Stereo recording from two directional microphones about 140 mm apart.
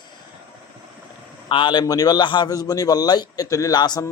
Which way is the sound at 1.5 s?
35° left (ahead or behind).